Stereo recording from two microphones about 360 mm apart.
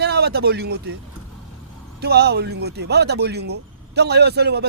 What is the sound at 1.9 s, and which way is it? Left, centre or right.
Speech, right.